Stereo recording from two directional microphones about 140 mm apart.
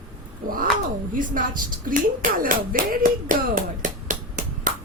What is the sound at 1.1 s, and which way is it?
Speech, 80° right.